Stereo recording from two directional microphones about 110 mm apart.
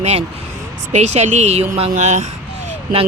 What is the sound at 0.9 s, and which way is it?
Speech, 90° right.